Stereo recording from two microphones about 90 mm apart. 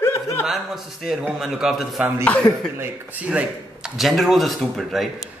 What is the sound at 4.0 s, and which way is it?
Speech, centre (ahead or behind).